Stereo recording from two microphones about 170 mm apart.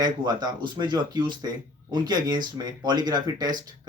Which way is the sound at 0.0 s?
25° right (ahead or behind).